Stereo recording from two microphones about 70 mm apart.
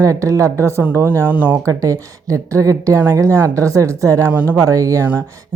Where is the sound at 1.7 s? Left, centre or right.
Right.